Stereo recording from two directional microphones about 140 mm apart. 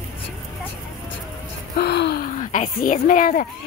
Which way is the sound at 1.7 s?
85° left.